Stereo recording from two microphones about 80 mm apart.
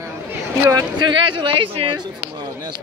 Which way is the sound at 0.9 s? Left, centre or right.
Right.